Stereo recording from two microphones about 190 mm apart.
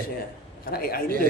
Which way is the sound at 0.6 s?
50° left (ahead or behind).